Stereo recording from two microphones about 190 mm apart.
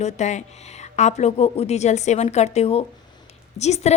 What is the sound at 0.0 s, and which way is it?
Speech, 40° left (ahead or behind).